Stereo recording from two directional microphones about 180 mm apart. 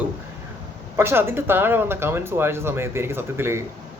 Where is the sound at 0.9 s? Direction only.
15° right (ahead or behind).